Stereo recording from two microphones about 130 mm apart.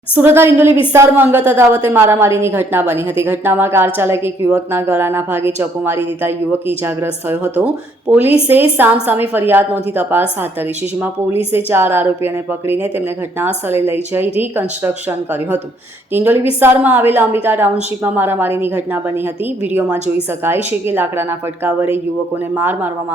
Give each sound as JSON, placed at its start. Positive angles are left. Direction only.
{"t": 0.2, "sound": "a woman's voice", "side_deg": -20}
{"t": 11.5, "sound": "a woman's voice", "side_deg": -15}
{"t": 20.8, "sound": "a woman's voice", "side_deg": -15}